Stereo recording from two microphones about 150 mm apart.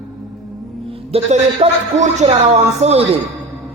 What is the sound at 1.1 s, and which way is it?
A man's voice, 40° right (ahead or behind).